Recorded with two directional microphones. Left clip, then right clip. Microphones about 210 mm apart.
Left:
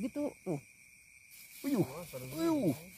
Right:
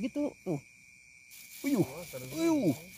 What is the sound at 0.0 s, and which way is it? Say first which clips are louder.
Speech: right 3 dB; 20° right (ahead or behind).